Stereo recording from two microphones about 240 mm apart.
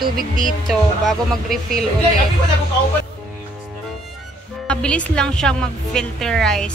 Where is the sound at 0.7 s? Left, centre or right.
Centre.